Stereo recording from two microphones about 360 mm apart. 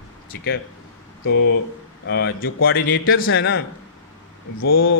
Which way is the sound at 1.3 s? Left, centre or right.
Left.